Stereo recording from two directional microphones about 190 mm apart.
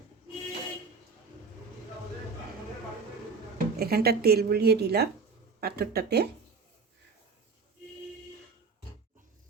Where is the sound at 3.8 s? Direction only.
55° right (ahead or behind).